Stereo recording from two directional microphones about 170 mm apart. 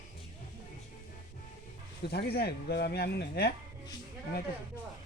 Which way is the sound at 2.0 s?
70° left (ahead or behind).